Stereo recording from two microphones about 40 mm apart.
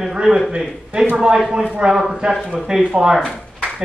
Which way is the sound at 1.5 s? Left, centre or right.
Right.